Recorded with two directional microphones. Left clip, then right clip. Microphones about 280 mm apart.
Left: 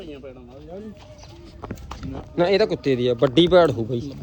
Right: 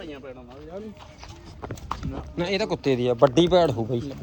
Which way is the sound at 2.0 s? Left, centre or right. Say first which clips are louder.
Left 13 dB; centre.